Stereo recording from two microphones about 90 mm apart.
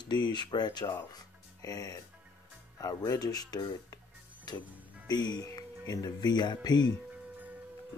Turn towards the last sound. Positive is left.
turn(degrees=50)  # may be behind; listen again after turning